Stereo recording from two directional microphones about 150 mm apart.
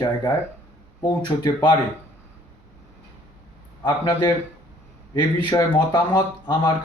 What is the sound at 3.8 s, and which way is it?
Speech, 25° left (ahead or behind).